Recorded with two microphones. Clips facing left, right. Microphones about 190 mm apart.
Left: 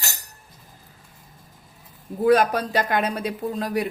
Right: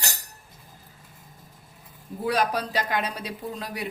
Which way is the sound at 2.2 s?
50° left (ahead or behind).